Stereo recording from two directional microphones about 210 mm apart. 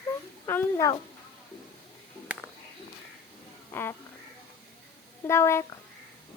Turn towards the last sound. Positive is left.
turn(degrees=15)  # may be behind; listen again after turning